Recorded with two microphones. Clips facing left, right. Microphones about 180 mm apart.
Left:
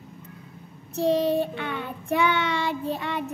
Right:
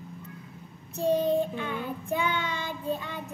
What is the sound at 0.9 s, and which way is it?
Child singing, 80° left.